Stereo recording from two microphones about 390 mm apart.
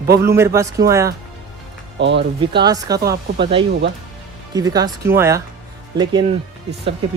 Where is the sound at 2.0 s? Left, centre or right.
Right.